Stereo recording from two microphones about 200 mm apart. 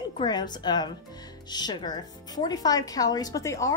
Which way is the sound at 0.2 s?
20° left (ahead or behind).